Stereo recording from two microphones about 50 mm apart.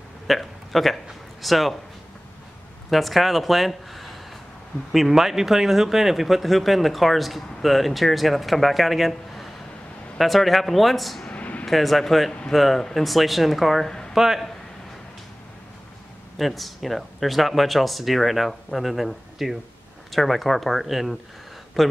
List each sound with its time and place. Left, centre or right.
0.3 s speech: centre
2.9 s speech: centre
11.2 s a sound: left
11.6 s a man's voice: centre
16.3 s speech: centre